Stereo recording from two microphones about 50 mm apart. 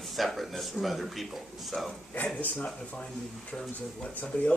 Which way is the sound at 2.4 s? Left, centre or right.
Left.